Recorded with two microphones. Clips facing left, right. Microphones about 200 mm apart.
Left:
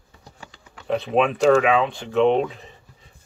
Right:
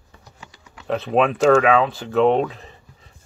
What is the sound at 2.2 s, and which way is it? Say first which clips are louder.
Speech: right 1 dB; 35° right (ahead or behind).